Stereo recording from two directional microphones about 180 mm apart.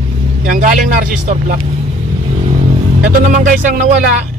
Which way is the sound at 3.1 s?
45° right (ahead or behind).